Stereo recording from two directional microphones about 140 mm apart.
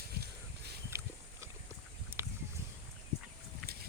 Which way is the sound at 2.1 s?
15° right (ahead or behind).